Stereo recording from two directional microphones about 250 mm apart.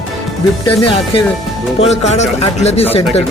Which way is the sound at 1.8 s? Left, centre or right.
Left.